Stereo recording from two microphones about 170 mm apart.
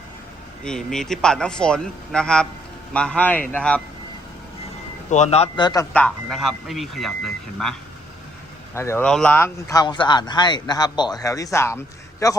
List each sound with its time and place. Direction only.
0.6 s speech: 5° left (ahead or behind)
5.1 s a man's voice: 40° left (ahead or behind)
5.5 s speech: 25° left (ahead or behind)
5.9 s speech: 5° left (ahead or behind)
8.7 s speech: 15° left (ahead or behind)